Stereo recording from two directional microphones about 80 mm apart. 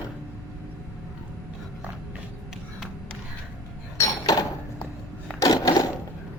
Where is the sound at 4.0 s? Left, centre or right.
Left.